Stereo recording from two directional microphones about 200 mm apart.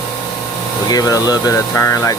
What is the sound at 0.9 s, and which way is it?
Speech, 20° left (ahead or behind).